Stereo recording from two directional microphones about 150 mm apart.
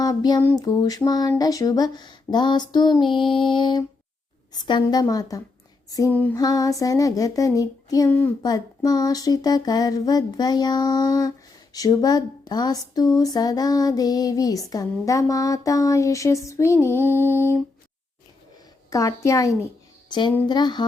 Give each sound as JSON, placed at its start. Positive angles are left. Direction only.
{"t": 0.0, "sound": "a sound", "side_deg": 25}
{"t": 0.6, "sound": "speech", "side_deg": 25}
{"t": 18.9, "sound": "speech", "side_deg": 20}